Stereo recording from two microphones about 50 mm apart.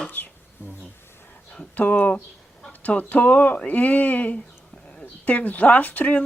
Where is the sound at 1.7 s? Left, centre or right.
Left.